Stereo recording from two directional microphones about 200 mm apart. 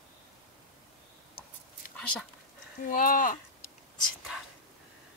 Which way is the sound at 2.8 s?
45° left (ahead or behind).